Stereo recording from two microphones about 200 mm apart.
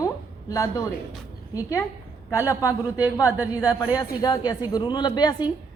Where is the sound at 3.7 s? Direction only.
20° left (ahead or behind).